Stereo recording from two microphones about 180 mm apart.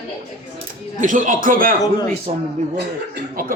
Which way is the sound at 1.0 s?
45° right (ahead or behind).